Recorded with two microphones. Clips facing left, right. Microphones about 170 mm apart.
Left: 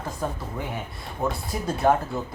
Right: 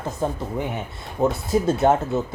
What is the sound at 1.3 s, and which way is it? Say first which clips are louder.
Speech: right 8 dB; 25° right (ahead or behind).